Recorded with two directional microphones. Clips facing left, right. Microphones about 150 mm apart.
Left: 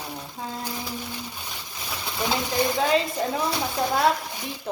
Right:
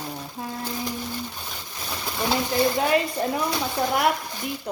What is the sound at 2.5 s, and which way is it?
Speech, 20° left (ahead or behind).